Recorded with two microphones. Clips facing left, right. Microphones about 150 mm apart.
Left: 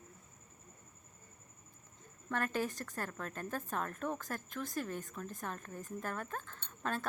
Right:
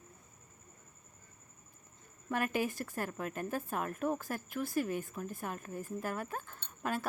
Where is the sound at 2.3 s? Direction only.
10° right (ahead or behind).